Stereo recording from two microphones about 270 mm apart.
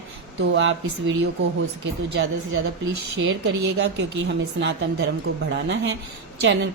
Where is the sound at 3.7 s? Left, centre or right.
Right.